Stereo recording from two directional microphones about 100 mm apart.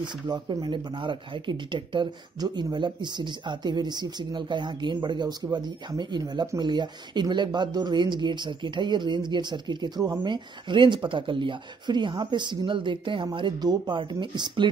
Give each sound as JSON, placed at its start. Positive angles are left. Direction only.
{"t": 0.0, "sound": "speech", "side_deg": -45}